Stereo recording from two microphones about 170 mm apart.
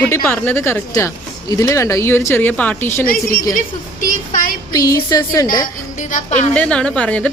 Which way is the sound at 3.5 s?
50° left (ahead or behind).